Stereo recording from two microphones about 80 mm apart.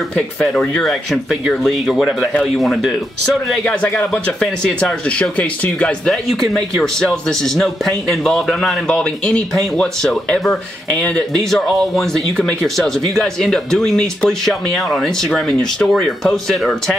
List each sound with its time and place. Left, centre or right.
0.1 s speech: centre
1.9 s speech: centre
3.6 s speech: centre
5.4 s speech: centre
6.5 s speech: centre